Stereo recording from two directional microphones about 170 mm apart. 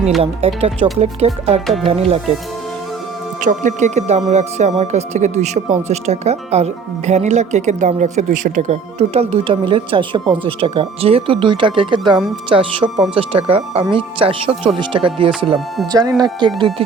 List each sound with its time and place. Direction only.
0.2 s speech: 35° right (ahead or behind)
1.6 s speech: centre (ahead or behind)
1.9 s speech: 35° right (ahead or behind)
3.4 s speech: 45° right (ahead or behind); by 16.5 s 25° right (ahead or behind)